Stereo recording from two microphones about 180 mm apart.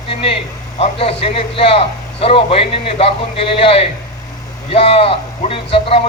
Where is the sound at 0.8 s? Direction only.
30° left (ahead or behind).